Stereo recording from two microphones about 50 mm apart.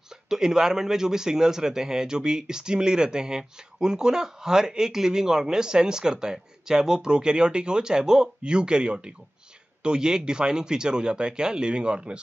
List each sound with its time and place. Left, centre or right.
0.3 s speech: centre